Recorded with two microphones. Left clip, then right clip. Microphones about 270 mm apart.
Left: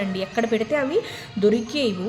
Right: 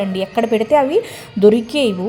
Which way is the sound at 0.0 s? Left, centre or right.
Centre.